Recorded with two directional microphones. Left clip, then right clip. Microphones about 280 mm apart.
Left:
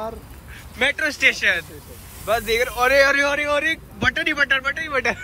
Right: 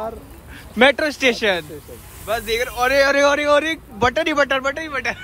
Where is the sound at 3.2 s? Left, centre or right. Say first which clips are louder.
Right 4 dB; right.